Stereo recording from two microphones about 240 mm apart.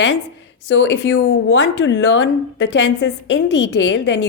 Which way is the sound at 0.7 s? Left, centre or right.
Left.